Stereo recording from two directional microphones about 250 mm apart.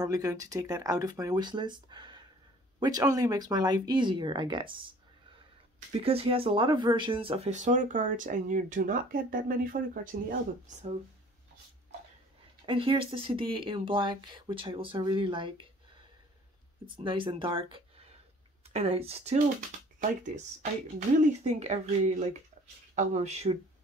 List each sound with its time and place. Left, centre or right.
0.0 s speech: centre
5.9 s speech: right
12.6 s speech: right
16.9 s speech: centre
21.2 s speech: right